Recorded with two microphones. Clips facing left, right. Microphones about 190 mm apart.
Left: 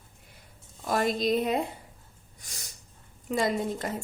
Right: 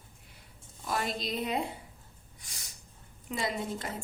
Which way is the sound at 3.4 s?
45° left (ahead or behind).